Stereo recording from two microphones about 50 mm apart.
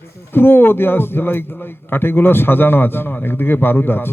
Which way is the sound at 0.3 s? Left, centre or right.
Left.